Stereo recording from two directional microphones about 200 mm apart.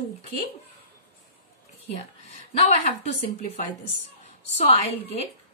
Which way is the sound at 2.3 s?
35° left (ahead or behind).